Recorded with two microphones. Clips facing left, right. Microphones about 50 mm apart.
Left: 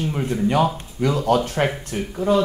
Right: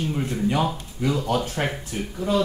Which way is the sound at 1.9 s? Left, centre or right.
Left.